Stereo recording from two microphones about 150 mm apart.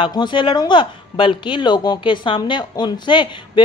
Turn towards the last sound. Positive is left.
turn(degrees=30)  # may be behind; listen again after turning